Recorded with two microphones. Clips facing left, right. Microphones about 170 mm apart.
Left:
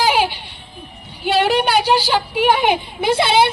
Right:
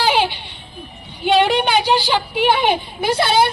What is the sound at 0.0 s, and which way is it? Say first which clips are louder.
Music: left 1 dB; 10° left (ahead or behind).